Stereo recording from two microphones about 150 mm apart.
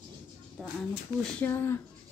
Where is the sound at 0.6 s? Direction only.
Centre (ahead or behind).